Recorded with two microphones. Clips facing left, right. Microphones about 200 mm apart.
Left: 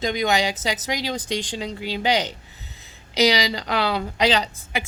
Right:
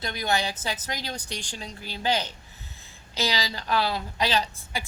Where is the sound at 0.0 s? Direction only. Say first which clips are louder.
Left 6 dB; 90° left.